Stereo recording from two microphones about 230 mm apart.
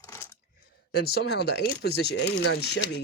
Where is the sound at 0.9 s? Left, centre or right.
Left.